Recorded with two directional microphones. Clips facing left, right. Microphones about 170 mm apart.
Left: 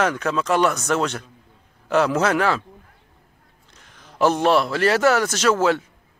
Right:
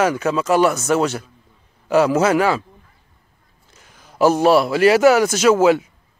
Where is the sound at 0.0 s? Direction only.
5° right (ahead or behind).